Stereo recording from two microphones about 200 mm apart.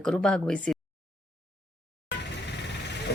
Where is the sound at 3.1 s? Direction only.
60° left (ahead or behind).